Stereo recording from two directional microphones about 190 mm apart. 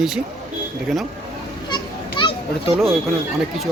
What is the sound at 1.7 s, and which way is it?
Children playing, 25° left (ahead or behind).